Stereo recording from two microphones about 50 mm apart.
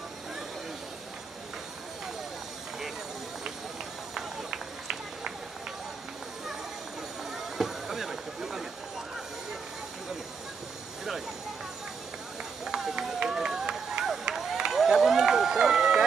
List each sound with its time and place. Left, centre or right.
4.1 s run: centre
7.3 s vehicle: centre
12.6 s run: centre
12.9 s run: centre
13.4 s crowd: centre